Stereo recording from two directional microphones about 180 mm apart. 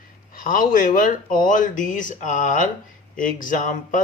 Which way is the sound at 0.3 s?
50° left (ahead or behind).